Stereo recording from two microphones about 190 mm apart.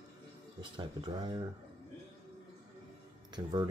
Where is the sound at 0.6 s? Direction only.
25° right (ahead or behind).